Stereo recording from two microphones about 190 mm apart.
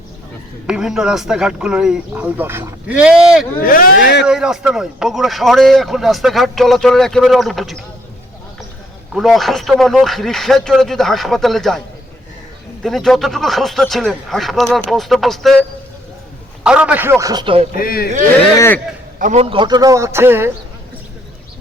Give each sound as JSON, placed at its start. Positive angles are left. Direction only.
{"t": 0.7, "sound": "a man's voice", "side_deg": -5}
{"t": 3.6, "sound": "a man's voice", "side_deg": 50}
{"t": 3.9, "sound": "speech", "side_deg": 70}
{"t": 4.3, "sound": "a man's voice", "side_deg": -5}
{"t": 9.1, "sound": "a man's voice", "side_deg": 0}
{"t": 12.8, "sound": "a man's voice", "side_deg": 0}
{"t": 16.6, "sound": "a man's voice", "side_deg": -5}
{"t": 17.7, "sound": "a man's voice", "side_deg": 50}
{"t": 18.5, "sound": "speech", "side_deg": 15}
{"t": 19.2, "sound": "a man's voice", "side_deg": -35}